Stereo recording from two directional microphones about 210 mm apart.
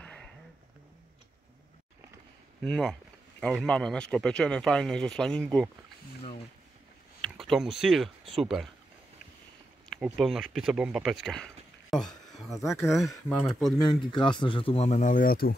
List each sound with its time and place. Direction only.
0.0 s a sound: 5° left (ahead or behind)
2.6 s speech: centre (ahead or behind)
7.2 s speech: centre (ahead or behind)
9.8 s speech: 5° right (ahead or behind)
13.7 s speech: 20° left (ahead or behind); by 15.5 s 45° left (ahead or behind)